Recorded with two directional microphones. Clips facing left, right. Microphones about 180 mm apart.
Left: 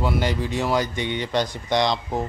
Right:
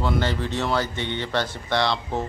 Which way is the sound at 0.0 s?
10° left (ahead or behind).